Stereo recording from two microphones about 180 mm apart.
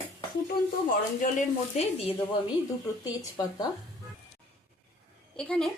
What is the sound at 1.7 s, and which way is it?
Speech, 30° left (ahead or behind).